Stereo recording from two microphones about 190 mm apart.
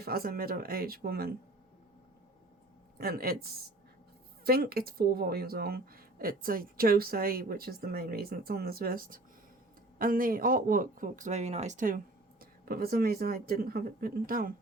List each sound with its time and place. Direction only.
0.0 s speech: 50° right (ahead or behind)
3.0 s speech: 50° right (ahead or behind)